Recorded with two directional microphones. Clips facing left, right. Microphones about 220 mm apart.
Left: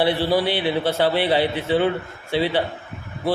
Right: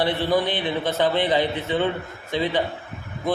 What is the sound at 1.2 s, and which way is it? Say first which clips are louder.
Speech: left 2 dB; 15° right (ahead or behind).